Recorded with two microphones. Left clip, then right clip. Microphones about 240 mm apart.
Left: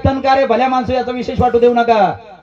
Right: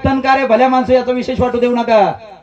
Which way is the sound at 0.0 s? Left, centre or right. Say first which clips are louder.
Even; centre.